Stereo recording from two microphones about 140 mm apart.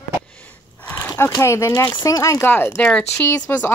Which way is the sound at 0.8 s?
15° left (ahead or behind).